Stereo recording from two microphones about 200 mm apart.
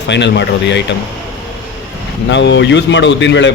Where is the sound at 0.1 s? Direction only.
60° left (ahead or behind).